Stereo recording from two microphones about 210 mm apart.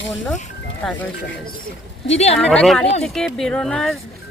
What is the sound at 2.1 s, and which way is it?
Speech, 30° left (ahead or behind).